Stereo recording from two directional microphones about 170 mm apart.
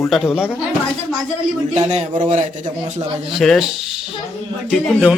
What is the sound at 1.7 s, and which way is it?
A man's voice, 40° right (ahead or behind).